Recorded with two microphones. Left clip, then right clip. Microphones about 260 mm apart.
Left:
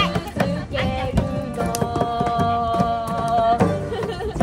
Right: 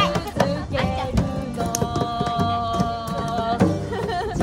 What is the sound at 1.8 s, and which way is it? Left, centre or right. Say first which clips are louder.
Music: left 3 dB; left.